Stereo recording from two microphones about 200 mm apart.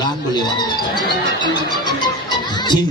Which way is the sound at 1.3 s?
20° left (ahead or behind).